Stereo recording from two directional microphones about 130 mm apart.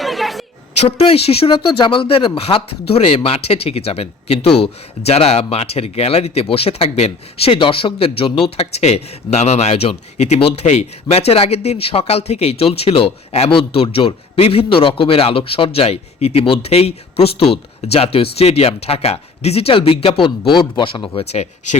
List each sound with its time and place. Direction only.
0.0 s a sound: centre (ahead or behind)
0.9 s speech: 50° left (ahead or behind)
21.2 s speech: 55° left (ahead or behind)